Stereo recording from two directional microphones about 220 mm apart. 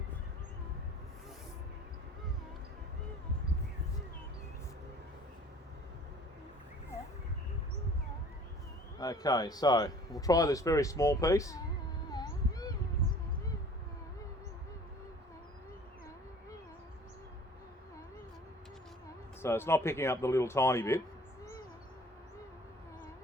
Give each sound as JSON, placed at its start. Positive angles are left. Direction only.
{"t": 9.0, "sound": "speech", "side_deg": 15}
{"t": 12.1, "sound": "cat", "side_deg": 20}
{"t": 19.4, "sound": "speech", "side_deg": 10}